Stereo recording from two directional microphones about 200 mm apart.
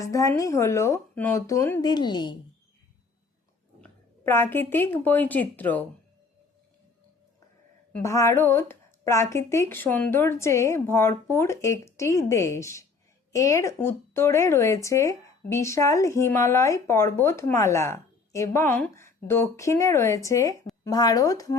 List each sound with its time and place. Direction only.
0.0 s speech: 15° left (ahead or behind)
3.8 s speech: 10° left (ahead or behind)
7.9 s speech: 15° left (ahead or behind)